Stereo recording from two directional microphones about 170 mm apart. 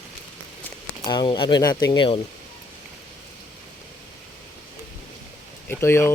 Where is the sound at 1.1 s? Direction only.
25° left (ahead or behind).